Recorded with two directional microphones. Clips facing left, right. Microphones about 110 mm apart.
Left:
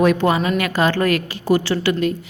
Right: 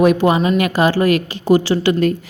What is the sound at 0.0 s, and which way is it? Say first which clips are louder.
A woman's voice: right 3 dB; 15° right (ahead or behind).